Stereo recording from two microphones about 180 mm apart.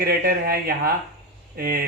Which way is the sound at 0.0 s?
55° right (ahead or behind).